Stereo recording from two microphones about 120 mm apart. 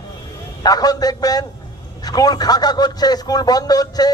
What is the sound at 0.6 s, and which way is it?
A man's voice, 30° left (ahead or behind).